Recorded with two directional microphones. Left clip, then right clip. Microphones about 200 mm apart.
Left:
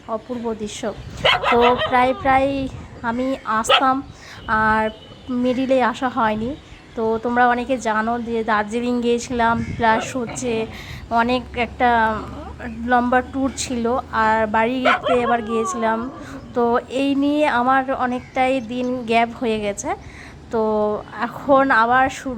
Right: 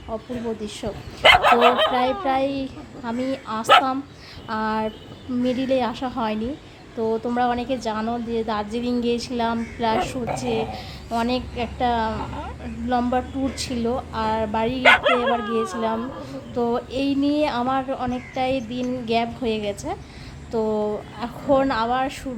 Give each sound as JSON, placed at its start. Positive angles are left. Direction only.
{"t": 0.1, "sound": "a woman's voice", "side_deg": 5}
{"t": 1.2, "sound": "dog", "side_deg": -50}
{"t": 1.9, "sound": "a woman's voice", "side_deg": 5}